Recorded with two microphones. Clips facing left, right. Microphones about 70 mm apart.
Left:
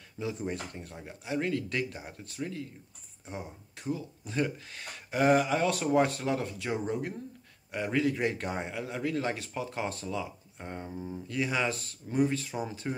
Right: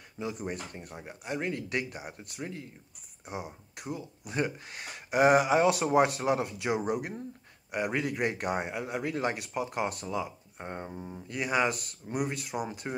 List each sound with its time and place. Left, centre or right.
0.2 s speech: centre
10.9 s speech: centre
11.1 s speech: centre